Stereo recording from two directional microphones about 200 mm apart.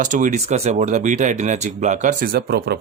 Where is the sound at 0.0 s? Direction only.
40° right (ahead or behind).